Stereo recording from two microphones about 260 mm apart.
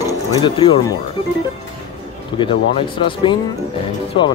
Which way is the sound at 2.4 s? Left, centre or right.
Centre.